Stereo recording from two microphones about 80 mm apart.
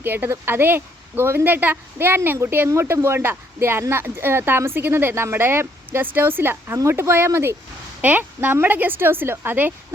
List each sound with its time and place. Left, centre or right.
0.0 s a woman's voice: right
8.0 s a woman's voice: right